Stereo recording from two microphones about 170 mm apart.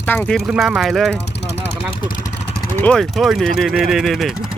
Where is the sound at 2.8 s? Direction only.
5° left (ahead or behind).